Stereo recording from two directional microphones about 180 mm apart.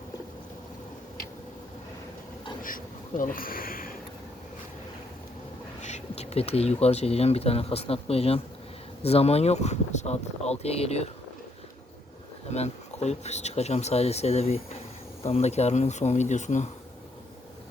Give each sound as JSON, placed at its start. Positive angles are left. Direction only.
{"t": 2.6, "sound": "speech", "side_deg": 50}
{"t": 5.8, "sound": "speech", "side_deg": 35}
{"t": 12.5, "sound": "speech", "side_deg": 35}